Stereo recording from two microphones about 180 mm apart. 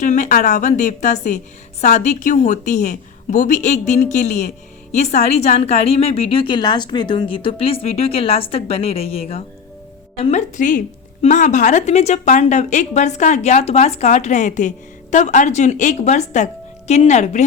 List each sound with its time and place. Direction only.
0.0 s a woman's voice: 45° left (ahead or behind)